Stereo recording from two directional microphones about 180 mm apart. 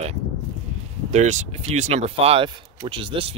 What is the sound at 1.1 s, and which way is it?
Speech, 40° right (ahead or behind).